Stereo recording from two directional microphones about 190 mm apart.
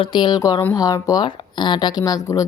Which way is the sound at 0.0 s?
25° left (ahead or behind).